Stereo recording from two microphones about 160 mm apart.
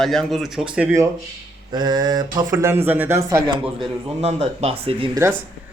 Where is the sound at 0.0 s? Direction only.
Centre (ahead or behind).